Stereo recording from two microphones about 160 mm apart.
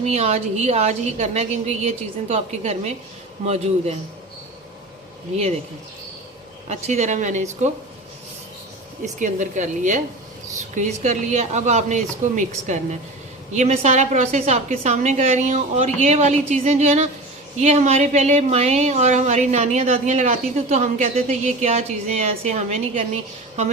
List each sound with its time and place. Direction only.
0.1 s speech: 40° right (ahead or behind)
6.7 s speech: 45° right (ahead or behind)
9.1 s speech: 50° right (ahead or behind)